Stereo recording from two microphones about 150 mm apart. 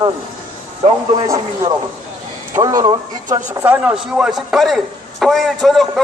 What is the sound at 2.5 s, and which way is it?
Speech, 25° right (ahead or behind).